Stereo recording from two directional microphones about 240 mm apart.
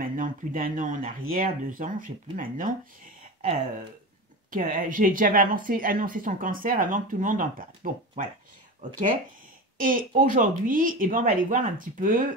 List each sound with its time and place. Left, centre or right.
0.0 s a woman's voice: right
4.5 s a woman's voice: right
9.8 s a woman's voice: right